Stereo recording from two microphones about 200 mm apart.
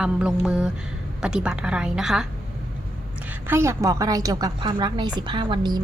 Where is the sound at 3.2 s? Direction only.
10° right (ahead or behind).